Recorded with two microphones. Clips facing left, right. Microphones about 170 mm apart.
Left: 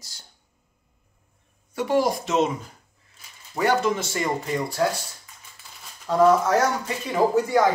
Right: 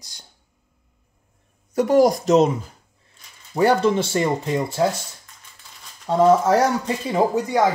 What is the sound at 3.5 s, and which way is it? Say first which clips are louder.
Speech: right 5 dB; 30° right (ahead or behind).